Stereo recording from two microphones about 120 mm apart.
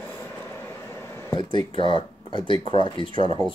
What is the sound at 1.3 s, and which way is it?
Speech, 35° left (ahead or behind).